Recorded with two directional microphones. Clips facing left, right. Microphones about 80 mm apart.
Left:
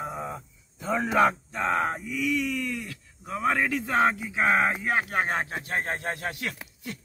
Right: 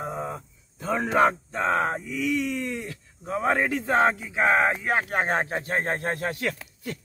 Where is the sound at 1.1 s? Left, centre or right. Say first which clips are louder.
Right 2 dB; right.